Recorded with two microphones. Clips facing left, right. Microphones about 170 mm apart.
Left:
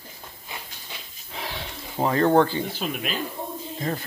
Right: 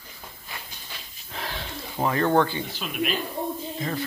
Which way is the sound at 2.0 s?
30° left (ahead or behind).